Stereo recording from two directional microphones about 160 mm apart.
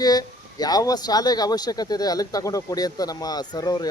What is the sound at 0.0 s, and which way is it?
Speech, 25° left (ahead or behind).